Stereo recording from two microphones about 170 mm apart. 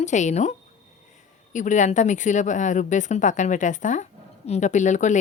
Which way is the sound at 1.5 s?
45° left (ahead or behind).